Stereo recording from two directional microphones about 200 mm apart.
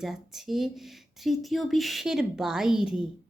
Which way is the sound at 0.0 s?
Centre (ahead or behind).